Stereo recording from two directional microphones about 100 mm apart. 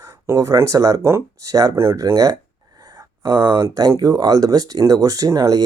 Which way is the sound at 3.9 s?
40° right (ahead or behind).